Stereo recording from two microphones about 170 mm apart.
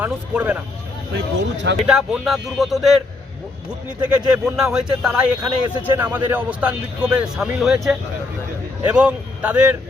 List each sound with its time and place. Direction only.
0.0 s speech: 10° right (ahead or behind)
1.1 s speech: 90° right
1.9 s a man's voice: centre (ahead or behind)
4.4 s a man's voice: 5° right (ahead or behind)